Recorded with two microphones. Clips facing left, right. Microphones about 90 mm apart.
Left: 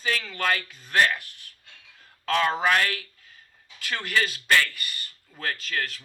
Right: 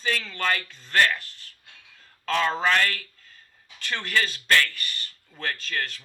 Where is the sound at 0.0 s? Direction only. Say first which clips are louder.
Even; 5° left (ahead or behind).